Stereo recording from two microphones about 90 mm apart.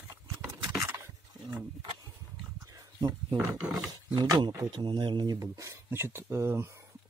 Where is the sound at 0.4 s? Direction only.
40° right (ahead or behind).